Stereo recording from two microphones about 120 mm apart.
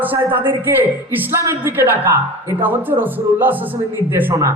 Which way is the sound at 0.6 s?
15° right (ahead or behind).